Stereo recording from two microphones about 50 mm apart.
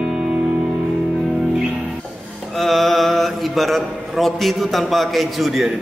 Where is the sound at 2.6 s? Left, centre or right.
Centre.